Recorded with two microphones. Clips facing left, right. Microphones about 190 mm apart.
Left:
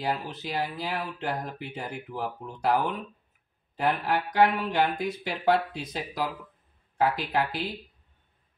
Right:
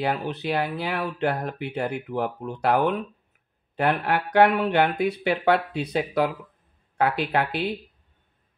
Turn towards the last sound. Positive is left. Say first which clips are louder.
# right 4 dB
turn(degrees=-65)  # may be behind; listen again after turning